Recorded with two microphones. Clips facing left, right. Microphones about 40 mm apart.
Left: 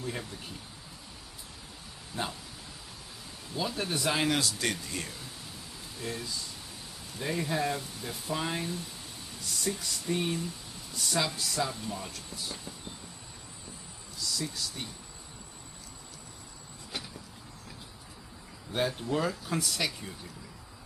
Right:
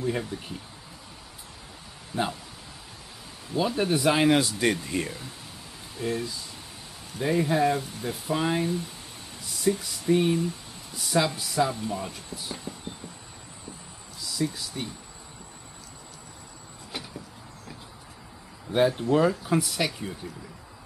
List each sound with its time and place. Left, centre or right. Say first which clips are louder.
0.0 s speech: right 8 dB; centre
2.1 s speech: right 7 dB; centre
3.5 s speech: right 8 dB; centre
14.2 s speech: right 5 dB; centre
16.9 s a sound: right 2 dB; centre
18.7 s speech: right 8 dB; centre